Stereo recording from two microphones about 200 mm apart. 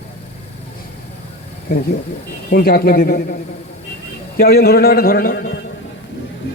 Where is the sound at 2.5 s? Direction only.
45° left (ahead or behind).